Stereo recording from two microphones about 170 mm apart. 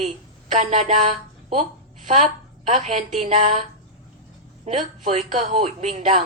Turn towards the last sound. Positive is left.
turn(degrees=-40)  # may be behind; listen again after turning